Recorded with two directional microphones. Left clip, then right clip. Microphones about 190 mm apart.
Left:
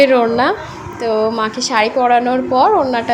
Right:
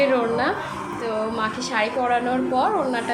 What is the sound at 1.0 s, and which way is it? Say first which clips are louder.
A woman's voice: left 10 dB; 40° left (ahead or behind).